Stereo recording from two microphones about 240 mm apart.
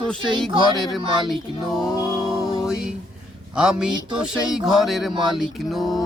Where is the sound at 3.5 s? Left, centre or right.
Centre.